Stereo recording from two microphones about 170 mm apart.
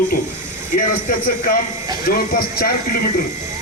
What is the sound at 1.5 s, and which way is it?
Speech, 60° left (ahead or behind).